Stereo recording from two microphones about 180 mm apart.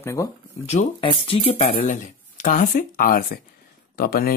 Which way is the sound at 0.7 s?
35° left (ahead or behind).